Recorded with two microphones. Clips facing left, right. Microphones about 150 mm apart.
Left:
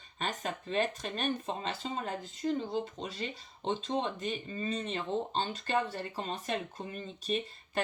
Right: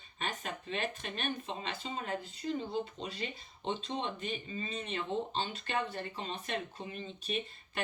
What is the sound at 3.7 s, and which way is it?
Speech, 40° left (ahead or behind).